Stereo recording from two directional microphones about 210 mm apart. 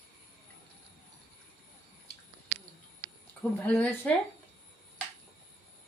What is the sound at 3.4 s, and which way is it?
Speech, 10° left (ahead or behind).